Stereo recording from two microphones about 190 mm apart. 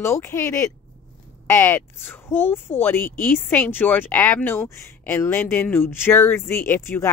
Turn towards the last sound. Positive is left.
turn(degrees=10)  # may be behind; listen again after turning